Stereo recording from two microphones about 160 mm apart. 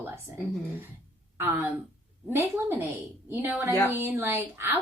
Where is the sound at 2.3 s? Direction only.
15° right (ahead or behind).